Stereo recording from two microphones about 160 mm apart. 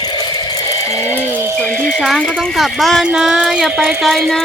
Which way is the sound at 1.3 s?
15° right (ahead or behind).